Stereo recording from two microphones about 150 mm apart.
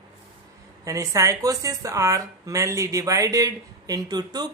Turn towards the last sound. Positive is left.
turn(degrees=-25)  # may be behind; listen again after turning